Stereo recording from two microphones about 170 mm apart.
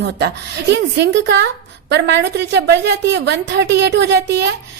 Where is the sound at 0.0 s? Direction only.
75° right (ahead or behind).